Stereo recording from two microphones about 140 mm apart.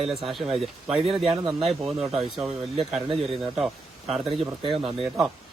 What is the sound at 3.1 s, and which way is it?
Speech, 45° right (ahead or behind).